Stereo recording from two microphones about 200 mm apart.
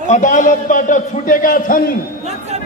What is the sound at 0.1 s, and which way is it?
A man's voice, 40° left (ahead or behind).